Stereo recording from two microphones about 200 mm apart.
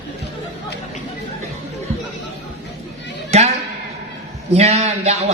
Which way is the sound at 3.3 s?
30° right (ahead or behind).